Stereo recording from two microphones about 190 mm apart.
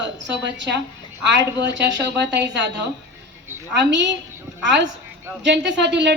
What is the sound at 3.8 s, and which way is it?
A woman's voice, 70° right (ahead or behind).